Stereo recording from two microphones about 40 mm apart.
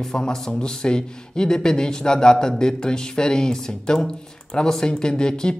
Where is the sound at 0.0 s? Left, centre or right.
Centre.